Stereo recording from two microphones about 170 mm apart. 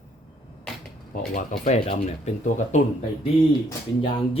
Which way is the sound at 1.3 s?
45° left (ahead or behind).